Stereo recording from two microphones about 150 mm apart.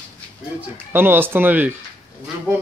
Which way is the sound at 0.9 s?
15° right (ahead or behind).